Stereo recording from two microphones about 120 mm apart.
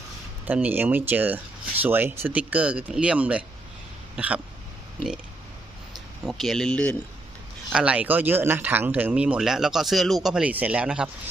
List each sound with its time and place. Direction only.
0.4 s speech: 15° right (ahead or behind)
4.1 s throat clearing: 10° right (ahead or behind)
6.2 s speech: centre (ahead or behind)
7.7 s speech: 10° right (ahead or behind)